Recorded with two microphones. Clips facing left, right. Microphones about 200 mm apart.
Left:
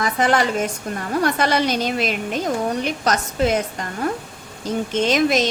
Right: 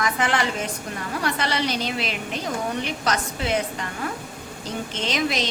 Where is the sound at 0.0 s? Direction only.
40° left (ahead or behind).